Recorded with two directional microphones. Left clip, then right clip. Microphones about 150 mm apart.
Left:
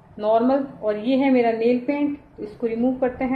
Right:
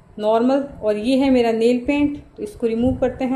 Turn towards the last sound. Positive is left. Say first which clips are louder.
# right 2 dB
turn(degrees=-35)  # may be behind; listen again after turning